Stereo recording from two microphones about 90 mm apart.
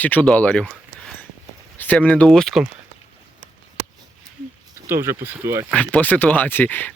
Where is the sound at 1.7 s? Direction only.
20° left (ahead or behind).